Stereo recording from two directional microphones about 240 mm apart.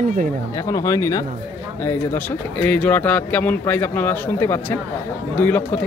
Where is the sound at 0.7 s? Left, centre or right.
Centre.